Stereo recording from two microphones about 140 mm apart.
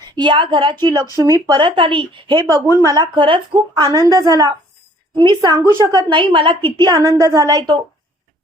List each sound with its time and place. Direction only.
0.2 s speech: 35° right (ahead or behind)
2.6 s a woman's voice: 15° right (ahead or behind)
2.9 s a woman's voice: 35° right (ahead or behind)
6.1 s speech: 35° right (ahead or behind)
7.0 s a woman's voice: 20° right (ahead or behind)